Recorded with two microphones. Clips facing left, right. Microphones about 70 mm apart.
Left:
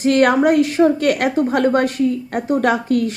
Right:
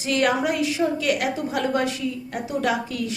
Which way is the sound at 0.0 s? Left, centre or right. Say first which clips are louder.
Left 8 dB; left.